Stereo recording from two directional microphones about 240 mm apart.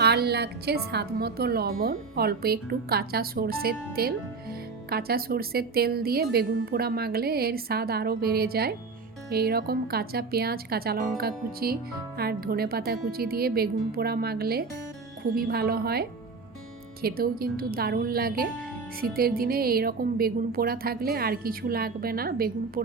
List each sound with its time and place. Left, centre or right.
0.0 s speech: right